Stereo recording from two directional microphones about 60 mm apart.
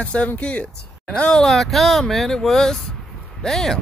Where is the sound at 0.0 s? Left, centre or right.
Centre.